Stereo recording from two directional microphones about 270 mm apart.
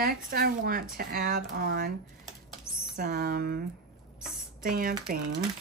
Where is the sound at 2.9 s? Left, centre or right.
Right.